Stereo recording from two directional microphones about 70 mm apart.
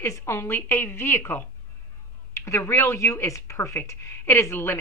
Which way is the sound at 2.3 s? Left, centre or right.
Left.